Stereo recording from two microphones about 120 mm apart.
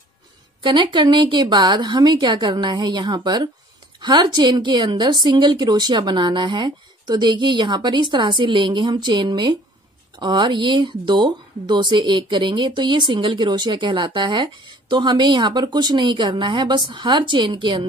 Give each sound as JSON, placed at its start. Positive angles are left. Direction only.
{"t": 0.6, "sound": "speech", "side_deg": -40}